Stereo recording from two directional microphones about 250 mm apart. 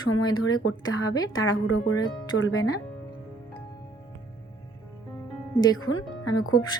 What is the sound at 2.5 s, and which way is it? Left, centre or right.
Speech, centre.